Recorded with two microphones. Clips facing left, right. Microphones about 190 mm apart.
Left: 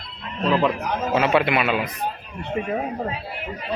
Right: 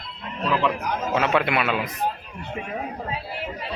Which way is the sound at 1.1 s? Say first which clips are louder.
Left 3 dB; 5° left (ahead or behind).